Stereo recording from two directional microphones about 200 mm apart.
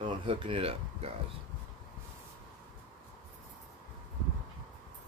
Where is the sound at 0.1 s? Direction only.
25° right (ahead or behind).